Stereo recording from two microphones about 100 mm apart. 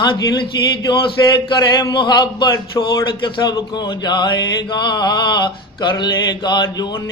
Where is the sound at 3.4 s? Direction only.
45° left (ahead or behind).